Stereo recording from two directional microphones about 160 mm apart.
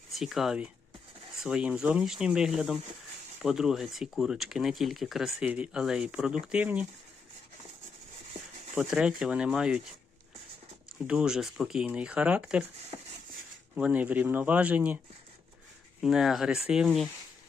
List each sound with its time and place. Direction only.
0.1 s a man's voice: centre (ahead or behind)
8.7 s speech: 5° right (ahead or behind)
11.0 s speech: 5° right (ahead or behind)
12.9 s a sound: 25° right (ahead or behind)
13.7 s a man's voice: 10° right (ahead or behind)
16.0 s speech: 5° right (ahead or behind)